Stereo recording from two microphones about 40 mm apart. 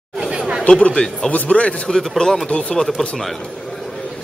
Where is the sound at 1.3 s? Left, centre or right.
Left.